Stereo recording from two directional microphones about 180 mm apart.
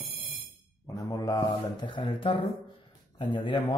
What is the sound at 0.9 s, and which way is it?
A man's voice, 20° left (ahead or behind).